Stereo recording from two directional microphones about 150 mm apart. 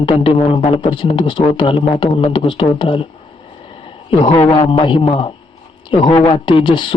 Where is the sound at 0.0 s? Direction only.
35° left (ahead or behind).